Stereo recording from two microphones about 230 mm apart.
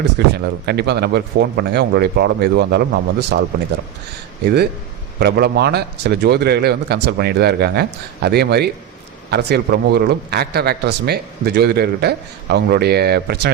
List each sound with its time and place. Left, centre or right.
0.3 s a man's voice: right
4.4 s a man's voice: right